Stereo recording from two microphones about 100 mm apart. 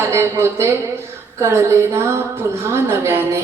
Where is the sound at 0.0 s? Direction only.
30° right (ahead or behind).